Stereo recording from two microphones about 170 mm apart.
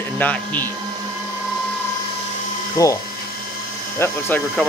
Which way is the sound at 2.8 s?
20° left (ahead or behind).